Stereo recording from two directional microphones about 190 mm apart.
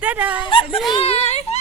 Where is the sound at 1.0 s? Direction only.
30° left (ahead or behind).